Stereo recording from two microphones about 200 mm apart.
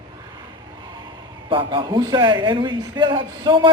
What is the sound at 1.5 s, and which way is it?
A man's voice, 25° right (ahead or behind).